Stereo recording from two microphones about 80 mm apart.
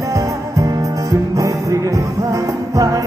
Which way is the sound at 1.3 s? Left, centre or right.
Right.